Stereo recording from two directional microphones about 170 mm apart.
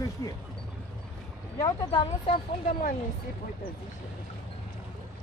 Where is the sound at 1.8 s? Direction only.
35° left (ahead or behind).